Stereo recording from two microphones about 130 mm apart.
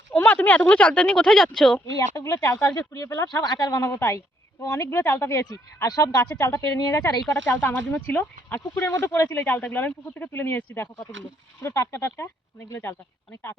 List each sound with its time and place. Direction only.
0.1 s speech: 10° left (ahead or behind)
2.1 s speech: 25° left (ahead or behind)
7.6 s speech: 10° left (ahead or behind)